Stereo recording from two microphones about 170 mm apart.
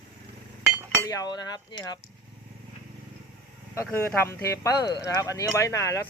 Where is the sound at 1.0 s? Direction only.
20° left (ahead or behind).